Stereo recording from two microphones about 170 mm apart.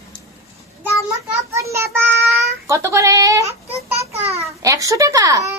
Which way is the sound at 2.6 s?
15° right (ahead or behind).